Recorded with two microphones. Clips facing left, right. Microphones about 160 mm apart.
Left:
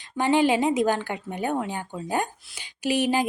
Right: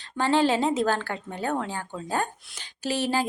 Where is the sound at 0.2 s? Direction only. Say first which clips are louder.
Left 2 dB; 15° left (ahead or behind).